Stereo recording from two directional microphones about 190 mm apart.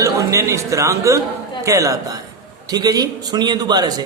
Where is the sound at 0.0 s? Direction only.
15° right (ahead or behind).